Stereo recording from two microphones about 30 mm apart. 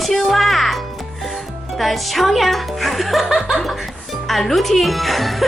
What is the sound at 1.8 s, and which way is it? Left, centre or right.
Speech, centre.